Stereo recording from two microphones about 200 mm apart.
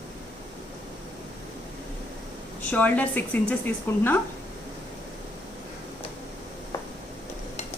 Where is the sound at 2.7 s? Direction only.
10° left (ahead or behind).